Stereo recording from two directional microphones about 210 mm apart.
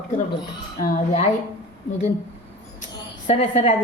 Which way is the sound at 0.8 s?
30° left (ahead or behind).